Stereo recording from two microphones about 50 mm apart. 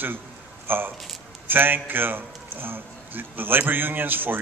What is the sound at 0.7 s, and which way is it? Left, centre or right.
A man's voice, right.